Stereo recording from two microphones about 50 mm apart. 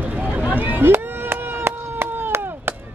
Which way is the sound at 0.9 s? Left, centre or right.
Right.